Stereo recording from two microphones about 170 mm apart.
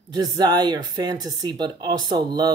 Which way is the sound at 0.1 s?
25° right (ahead or behind).